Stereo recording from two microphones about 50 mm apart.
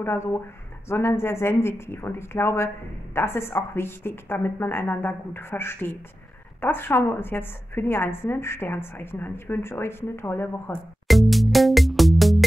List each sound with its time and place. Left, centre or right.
0.0 s a woman's voice: left
11.1 s music: centre